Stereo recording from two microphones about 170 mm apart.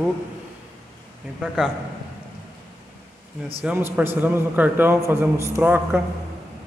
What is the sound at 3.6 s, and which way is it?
A man's voice, 10° right (ahead or behind).